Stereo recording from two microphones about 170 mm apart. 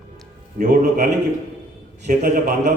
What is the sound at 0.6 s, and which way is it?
A man's voice, 55° right (ahead or behind).